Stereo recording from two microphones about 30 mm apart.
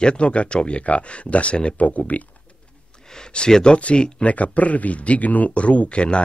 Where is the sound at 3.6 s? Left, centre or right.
Left.